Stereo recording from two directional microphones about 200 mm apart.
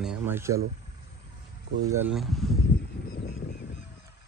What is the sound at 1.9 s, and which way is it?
Speech, 5° right (ahead or behind).